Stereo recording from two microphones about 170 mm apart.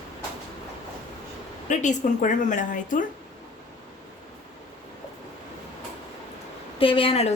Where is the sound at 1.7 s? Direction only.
45° left (ahead or behind).